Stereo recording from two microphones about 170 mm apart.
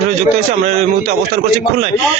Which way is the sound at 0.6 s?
40° right (ahead or behind).